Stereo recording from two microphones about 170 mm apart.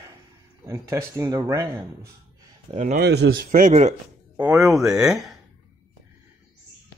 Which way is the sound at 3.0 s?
75° right (ahead or behind).